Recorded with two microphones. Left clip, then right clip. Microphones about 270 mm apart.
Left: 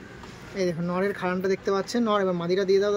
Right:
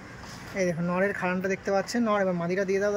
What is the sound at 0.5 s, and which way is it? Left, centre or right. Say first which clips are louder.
Speech: even; centre.